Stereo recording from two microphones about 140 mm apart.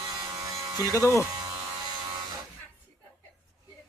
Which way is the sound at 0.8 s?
25° left (ahead or behind).